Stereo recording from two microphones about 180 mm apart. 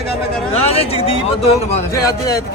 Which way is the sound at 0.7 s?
35° left (ahead or behind).